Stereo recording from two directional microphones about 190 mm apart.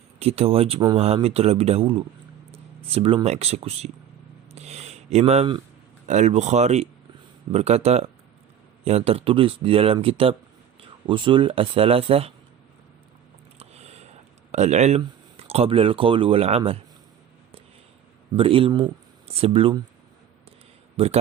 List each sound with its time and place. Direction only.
0.2 s speech: 30° right (ahead or behind)
4.5 s a sound: 35° right (ahead or behind)
6.1 s speech: 35° right (ahead or behind)
13.6 s a sound: 35° right (ahead or behind)
14.5 s speech: 35° right (ahead or behind)
18.3 s speech: 30° right (ahead or behind)
20.9 s speech: 30° right (ahead or behind)